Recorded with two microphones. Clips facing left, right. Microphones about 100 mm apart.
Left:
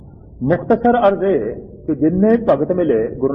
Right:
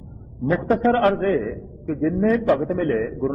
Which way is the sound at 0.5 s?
15° left (ahead or behind).